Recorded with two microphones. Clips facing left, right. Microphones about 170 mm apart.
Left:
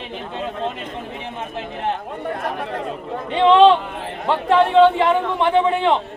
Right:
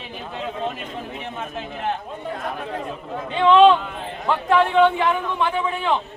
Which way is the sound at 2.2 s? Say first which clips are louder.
Left 4 dB; 65° left (ahead or behind).